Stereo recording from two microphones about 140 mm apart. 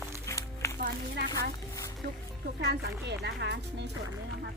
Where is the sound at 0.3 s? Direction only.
20° left (ahead or behind).